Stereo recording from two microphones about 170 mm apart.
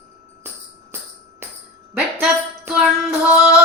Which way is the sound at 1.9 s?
5° right (ahead or behind).